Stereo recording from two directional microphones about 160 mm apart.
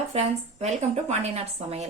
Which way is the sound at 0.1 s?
40° right (ahead or behind).